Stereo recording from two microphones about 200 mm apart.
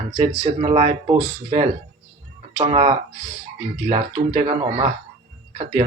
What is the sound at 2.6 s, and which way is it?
Speech, 35° right (ahead or behind).